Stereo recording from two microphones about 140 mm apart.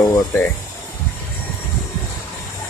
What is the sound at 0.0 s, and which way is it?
Speech, 20° left (ahead or behind).